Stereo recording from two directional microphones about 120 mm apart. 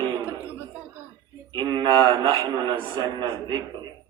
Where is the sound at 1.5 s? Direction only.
40° right (ahead or behind).